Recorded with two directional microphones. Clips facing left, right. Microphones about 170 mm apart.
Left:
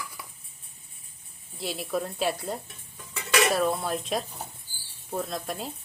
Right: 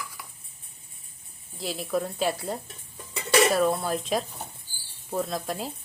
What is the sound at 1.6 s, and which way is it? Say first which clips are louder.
Speech: right 2 dB; centre (ahead or behind).